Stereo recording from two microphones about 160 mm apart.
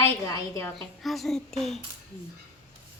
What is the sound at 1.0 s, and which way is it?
Speech, centre (ahead or behind).